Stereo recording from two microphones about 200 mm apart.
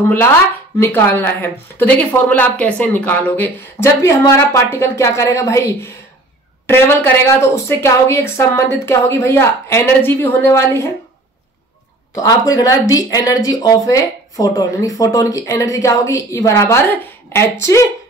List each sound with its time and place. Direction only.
0.7 s speech: 10° left (ahead or behind)
12.2 s speech: 15° left (ahead or behind)